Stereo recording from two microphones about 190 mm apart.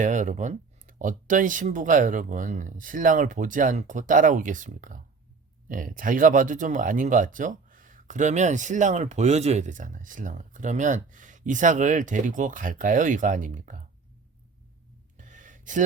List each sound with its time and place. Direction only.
0.0 s speech: 40° right (ahead or behind)
15.2 s gasp: 40° right (ahead or behind)